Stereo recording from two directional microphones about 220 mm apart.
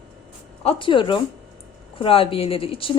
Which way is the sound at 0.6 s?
25° left (ahead or behind).